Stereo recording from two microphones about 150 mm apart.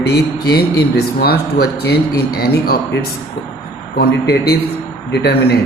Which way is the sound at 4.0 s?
90° left.